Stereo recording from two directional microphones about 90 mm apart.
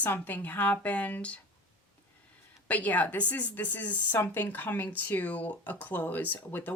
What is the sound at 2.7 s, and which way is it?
A woman's voice, 15° left (ahead or behind).